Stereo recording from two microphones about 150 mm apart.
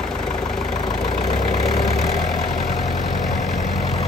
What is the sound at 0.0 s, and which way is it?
Vehicle, 5° left (ahead or behind).